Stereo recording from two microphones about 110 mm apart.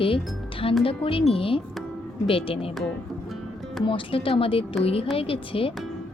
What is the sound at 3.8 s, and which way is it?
Speech, 55° left (ahead or behind).